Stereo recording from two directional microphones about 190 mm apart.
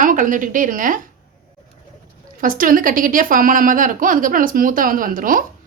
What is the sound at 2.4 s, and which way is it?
A woman's voice, 45° right (ahead or behind).